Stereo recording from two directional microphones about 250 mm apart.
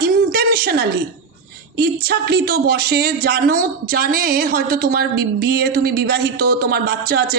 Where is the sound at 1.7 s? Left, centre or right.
Right.